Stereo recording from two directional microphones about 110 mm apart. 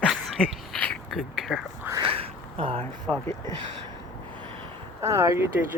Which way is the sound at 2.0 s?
55° right (ahead or behind).